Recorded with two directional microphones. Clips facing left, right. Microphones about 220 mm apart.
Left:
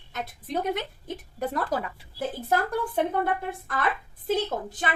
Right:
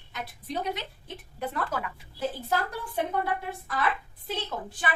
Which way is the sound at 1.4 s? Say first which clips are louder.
Left 4 dB; 35° left (ahead or behind).